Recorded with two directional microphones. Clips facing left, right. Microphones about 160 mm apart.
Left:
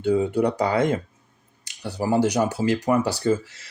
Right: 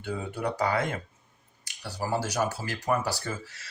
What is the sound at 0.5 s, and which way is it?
Speech, 20° left (ahead or behind).